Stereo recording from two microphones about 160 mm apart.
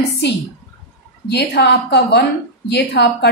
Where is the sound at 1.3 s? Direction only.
90° left.